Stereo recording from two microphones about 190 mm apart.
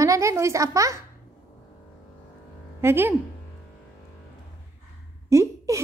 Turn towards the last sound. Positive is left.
turn(degrees=-15)  # may be behind; listen again after turning